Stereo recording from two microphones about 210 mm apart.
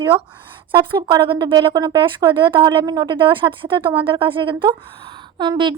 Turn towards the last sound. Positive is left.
turn(degrees=-20)  # may be behind; listen again after turning